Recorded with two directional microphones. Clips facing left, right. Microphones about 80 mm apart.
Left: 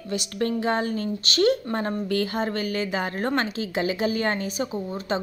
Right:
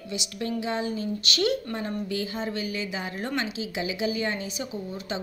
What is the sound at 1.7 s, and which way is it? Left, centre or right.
A woman's voice, left.